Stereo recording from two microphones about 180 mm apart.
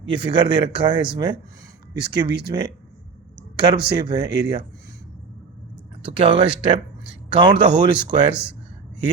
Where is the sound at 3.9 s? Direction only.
25° right (ahead or behind).